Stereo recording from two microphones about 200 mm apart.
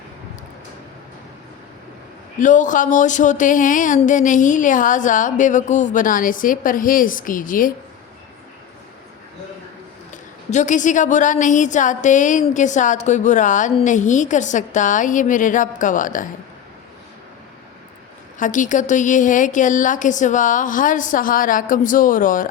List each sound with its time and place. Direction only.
2.4 s a woman's voice: 40° left (ahead or behind)
10.1 s a woman's voice: 35° left (ahead or behind)
18.3 s a woman's voice: 40° left (ahead or behind)